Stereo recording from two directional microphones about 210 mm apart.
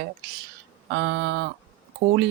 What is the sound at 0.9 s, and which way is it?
Speech, 55° right (ahead or behind).